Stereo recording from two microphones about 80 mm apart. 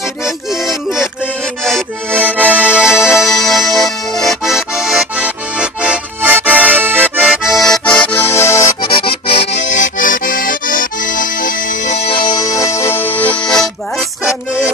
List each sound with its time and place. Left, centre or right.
0.2 s music: centre
1.6 s accordion: centre
2.1 s accordion: right
3.3 s accordion: centre
4.6 s accordion: centre; by 7.2 s right
7.2 s accordion: centre
7.8 s accordion: centre
8.2 s accordion: left
12.1 s music: left
12.4 s music: left; by 14.0 s centre